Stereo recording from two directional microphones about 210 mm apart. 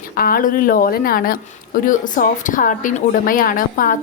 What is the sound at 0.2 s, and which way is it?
A woman's voice, 45° left (ahead or behind).